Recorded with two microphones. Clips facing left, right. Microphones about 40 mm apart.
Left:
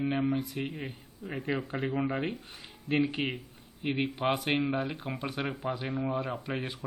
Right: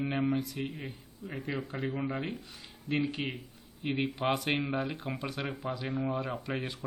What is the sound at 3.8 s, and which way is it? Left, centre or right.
Speech, centre.